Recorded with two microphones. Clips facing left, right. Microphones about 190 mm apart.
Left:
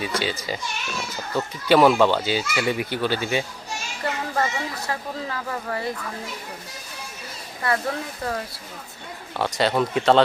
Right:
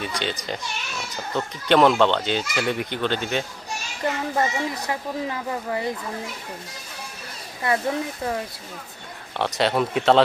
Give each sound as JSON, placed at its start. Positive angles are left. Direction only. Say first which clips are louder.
{"t": 0.0, "sound": "speech", "louder": "left 2 dB", "side_deg": 5}
{"t": 4.0, "sound": "a child's voice", "louder": "right 2 dB", "side_deg": -20}
{"t": 7.6, "sound": "speech", "louder": "right 2 dB", "side_deg": -20}
{"t": 9.4, "sound": "speech", "louder": "even", "side_deg": 0}